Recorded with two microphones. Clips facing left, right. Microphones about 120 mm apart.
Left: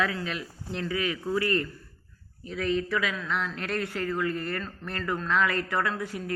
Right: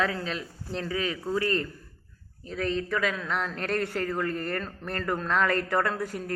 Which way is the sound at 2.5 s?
35° right (ahead or behind).